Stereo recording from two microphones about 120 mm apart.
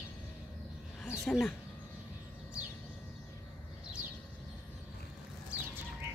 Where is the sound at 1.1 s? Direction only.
5° left (ahead or behind).